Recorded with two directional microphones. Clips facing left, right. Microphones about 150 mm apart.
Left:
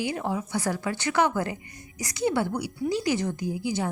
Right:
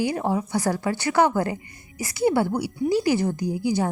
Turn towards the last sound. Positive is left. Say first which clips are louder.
# right 5 dB
turn(degrees=-40)  # may be behind; listen again after turning